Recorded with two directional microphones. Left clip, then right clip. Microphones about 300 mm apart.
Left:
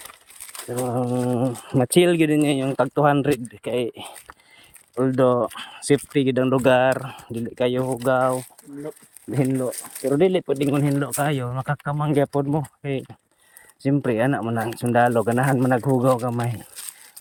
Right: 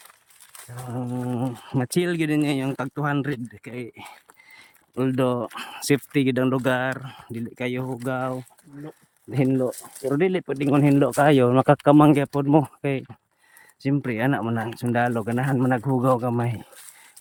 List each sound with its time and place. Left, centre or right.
0.9 s speech: centre
4.9 s speech: centre